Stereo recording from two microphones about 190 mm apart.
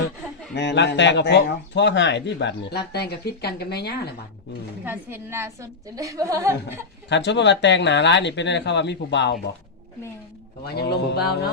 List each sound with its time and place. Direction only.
0.5 s a man's voice: 65° left (ahead or behind)
4.9 s a woman's voice: 10° right (ahead or behind)
7.1 s a man's voice: 65° left (ahead or behind)
10.7 s a man's voice: 60° left (ahead or behind)